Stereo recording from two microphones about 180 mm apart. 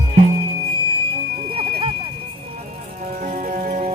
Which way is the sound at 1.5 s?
30° right (ahead or behind).